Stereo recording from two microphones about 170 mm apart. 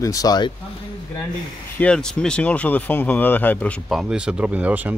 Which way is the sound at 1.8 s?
5° left (ahead or behind).